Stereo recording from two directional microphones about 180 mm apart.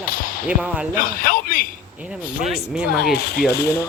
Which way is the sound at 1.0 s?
50° left (ahead or behind).